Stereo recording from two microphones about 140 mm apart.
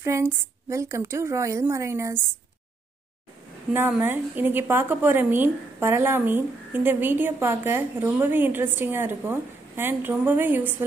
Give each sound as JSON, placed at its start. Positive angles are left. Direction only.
{"t": 0.0, "sound": "a woman's voice", "side_deg": -20}
{"t": 4.0, "sound": "a woman's voice", "side_deg": -15}